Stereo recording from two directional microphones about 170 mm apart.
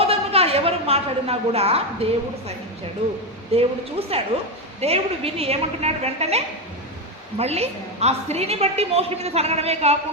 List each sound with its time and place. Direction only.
0.0 s a sound: 35° right (ahead or behind)
2.0 s a woman's voice: 35° right (ahead or behind)
3.5 s a woman's voice: 35° right (ahead or behind)